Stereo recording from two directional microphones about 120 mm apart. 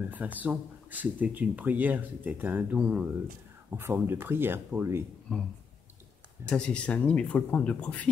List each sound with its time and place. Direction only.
0.4 s speech: 15° right (ahead or behind)
3.7 s speech: 20° right (ahead or behind)
5.3 s speech: 5° left (ahead or behind)
6.5 s speech: 10° left (ahead or behind)